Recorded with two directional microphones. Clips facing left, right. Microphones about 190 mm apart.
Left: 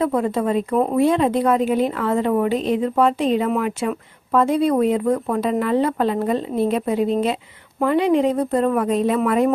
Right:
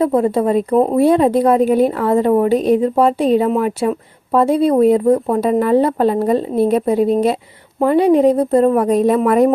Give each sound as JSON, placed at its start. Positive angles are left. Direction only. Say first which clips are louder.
{"t": 0.0, "sound": "a woman's voice", "louder": "right 5 dB", "side_deg": -30}